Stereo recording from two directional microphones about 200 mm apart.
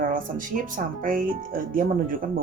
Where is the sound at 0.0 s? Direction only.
45° right (ahead or behind).